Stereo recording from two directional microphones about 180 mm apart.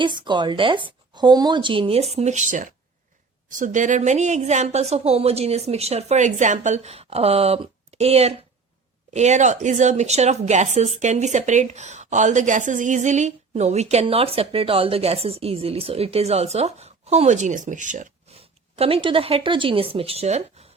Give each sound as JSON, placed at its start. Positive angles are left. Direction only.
{"t": 0.0, "sound": "a woman's voice", "side_deg": -25}
{"t": 18.8, "sound": "a woman's voice", "side_deg": -30}